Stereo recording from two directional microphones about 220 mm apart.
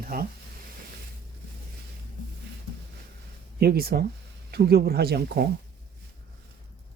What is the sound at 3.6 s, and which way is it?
Speech, 45° right (ahead or behind).